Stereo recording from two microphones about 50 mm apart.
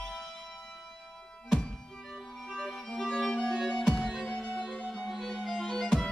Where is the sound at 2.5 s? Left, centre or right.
Centre.